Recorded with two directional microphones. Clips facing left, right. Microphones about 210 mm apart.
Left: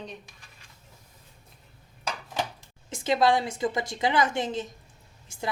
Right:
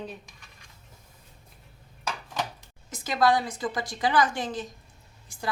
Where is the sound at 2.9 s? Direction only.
25° left (ahead or behind).